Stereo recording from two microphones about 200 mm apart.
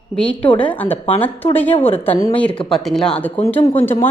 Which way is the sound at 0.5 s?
10° left (ahead or behind).